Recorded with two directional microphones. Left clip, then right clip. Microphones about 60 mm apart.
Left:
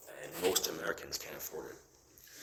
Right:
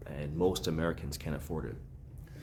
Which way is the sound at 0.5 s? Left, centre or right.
Right.